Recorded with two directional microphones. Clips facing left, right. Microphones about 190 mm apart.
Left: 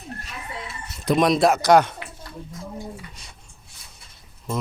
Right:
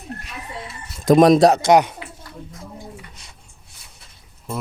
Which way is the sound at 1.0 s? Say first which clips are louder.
Right 7 dB; 45° right (ahead or behind).